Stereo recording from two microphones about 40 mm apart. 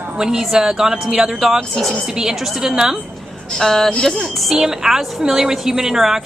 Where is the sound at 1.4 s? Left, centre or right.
Centre.